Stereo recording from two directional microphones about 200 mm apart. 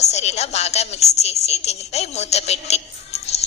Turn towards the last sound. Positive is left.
turn(degrees=30)  # may be behind; listen again after turning